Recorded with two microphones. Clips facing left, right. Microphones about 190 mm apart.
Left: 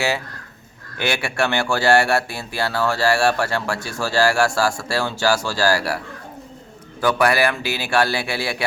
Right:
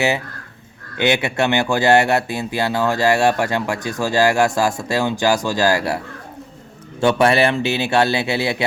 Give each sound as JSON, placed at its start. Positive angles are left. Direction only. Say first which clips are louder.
{"t": 0.9, "sound": "speech", "louder": "right 4 dB", "side_deg": -20}
{"t": 7.0, "sound": "speech", "louder": "right 3 dB", "side_deg": -25}